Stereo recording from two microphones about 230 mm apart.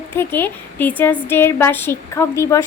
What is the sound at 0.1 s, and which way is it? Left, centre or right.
A woman's voice, centre.